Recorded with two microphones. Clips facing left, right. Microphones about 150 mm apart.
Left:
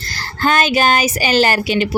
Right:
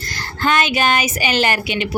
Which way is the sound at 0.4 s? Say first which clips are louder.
Left 3 dB; 35° left (ahead or behind).